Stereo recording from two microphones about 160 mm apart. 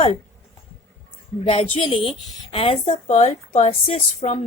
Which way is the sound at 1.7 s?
35° left (ahead or behind).